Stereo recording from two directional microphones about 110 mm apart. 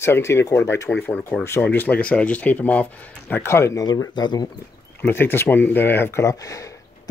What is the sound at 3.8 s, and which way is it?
Speech, 35° left (ahead or behind).